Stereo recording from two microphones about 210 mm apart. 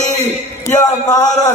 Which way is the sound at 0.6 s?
15° left (ahead or behind).